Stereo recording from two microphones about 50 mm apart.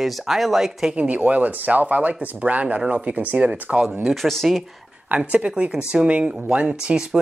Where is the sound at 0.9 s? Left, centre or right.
Right.